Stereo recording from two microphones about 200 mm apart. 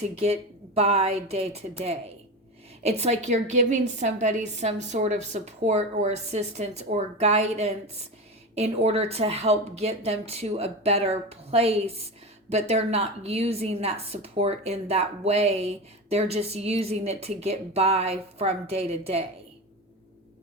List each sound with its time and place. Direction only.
0.2 s speech: 30° right (ahead or behind)